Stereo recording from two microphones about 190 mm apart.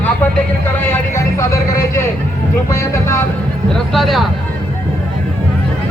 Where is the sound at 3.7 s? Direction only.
Centre (ahead or behind).